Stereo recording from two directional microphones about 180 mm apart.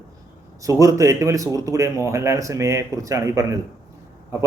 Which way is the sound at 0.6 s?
20° right (ahead or behind).